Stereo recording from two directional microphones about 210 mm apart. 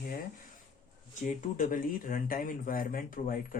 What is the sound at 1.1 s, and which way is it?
Speech, 40° left (ahead or behind).